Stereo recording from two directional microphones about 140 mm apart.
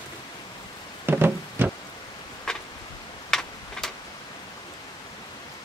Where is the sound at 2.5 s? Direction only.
5° left (ahead or behind).